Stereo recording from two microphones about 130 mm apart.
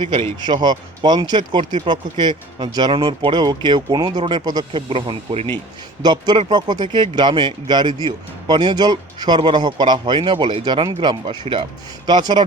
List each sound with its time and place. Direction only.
0.3 s speech: 35° right (ahead or behind)
6.0 s speech: 35° right (ahead or behind)